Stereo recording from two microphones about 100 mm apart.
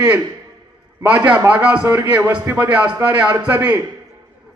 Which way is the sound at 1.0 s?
20° right (ahead or behind).